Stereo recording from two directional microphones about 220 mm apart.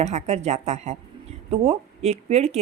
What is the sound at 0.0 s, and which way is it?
A woman's voice, 30° right (ahead or behind).